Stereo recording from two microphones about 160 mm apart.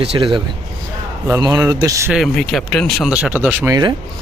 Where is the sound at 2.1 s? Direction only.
Centre (ahead or behind).